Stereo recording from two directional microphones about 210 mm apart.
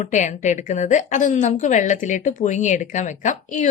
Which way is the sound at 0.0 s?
35° left (ahead or behind).